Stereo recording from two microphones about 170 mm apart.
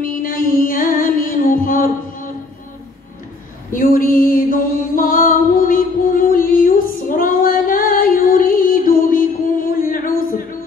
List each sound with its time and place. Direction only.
0.0 s music: 55° left (ahead or behind)
3.7 s music: 55° left (ahead or behind)